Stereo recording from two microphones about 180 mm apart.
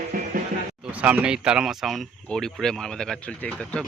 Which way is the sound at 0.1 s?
50° right (ahead or behind).